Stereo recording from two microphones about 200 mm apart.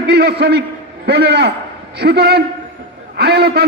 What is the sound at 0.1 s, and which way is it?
A man's voice, 55° right (ahead or behind).